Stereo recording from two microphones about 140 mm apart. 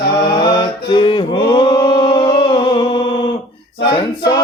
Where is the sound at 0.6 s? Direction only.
35° left (ahead or behind).